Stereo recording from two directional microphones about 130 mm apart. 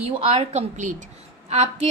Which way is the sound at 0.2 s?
50° right (ahead or behind).